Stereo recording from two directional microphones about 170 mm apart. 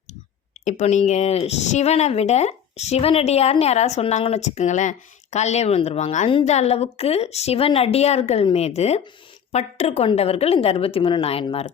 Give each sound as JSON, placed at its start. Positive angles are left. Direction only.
{"t": 0.6, "sound": "speech", "side_deg": 45}